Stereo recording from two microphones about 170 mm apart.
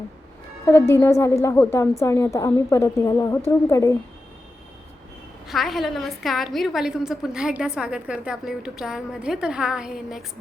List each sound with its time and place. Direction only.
0.7 s a woman's voice: 15° left (ahead or behind)
5.5 s a woman's voice: centre (ahead or behind)